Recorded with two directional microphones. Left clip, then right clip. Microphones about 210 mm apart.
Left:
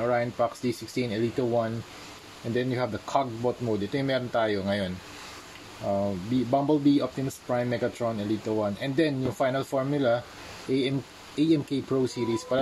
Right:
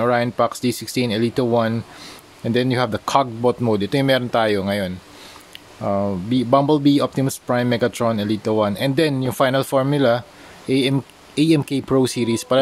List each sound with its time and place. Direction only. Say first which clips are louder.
0.0 s speech: right 8 dB; 40° right (ahead or behind)
5.9 s speech: right 7 dB; 45° right (ahead or behind)